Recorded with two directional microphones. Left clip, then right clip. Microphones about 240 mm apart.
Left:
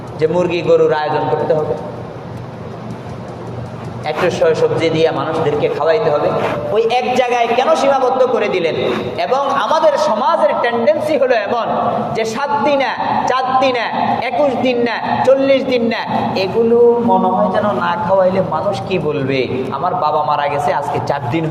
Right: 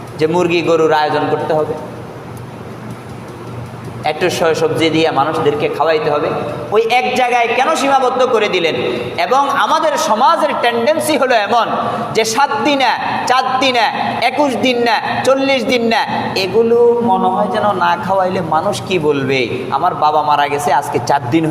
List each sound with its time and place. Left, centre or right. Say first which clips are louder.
0.2 s a man's voice: right 1 dB; right
4.0 s a man's voice: even; right